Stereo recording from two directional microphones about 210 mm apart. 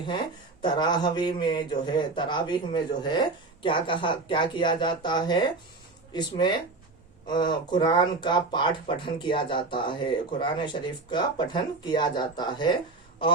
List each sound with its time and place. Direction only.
0.0 s speech: 20° left (ahead or behind)